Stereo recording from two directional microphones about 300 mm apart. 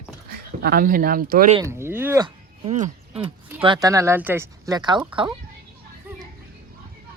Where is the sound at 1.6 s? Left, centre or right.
Centre.